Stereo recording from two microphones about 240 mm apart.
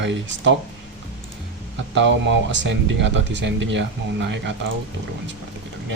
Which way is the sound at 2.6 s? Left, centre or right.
Right.